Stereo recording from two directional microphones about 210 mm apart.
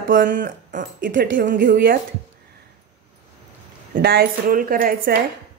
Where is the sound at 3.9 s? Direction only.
50° right (ahead or behind).